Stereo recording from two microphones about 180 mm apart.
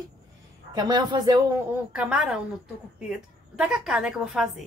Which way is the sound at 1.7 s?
5° right (ahead or behind).